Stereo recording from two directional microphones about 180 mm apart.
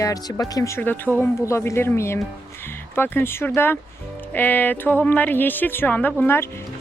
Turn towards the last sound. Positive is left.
turn(degrees=10)  # may be behind; listen again after turning